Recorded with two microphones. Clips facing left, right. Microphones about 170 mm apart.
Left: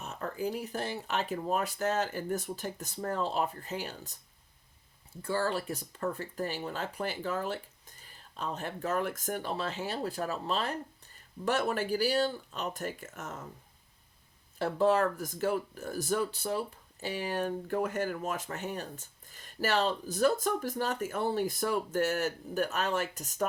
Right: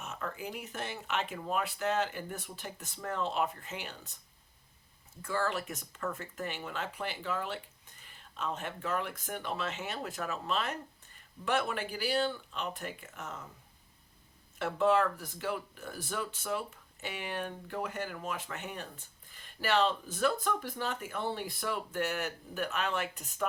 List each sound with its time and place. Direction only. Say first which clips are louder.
0.0 s speech: left 5 dB; 40° left (ahead or behind)
5.2 s speech: left 2 dB; 30° left (ahead or behind)
14.6 s speech: left 2 dB; 35° left (ahead or behind)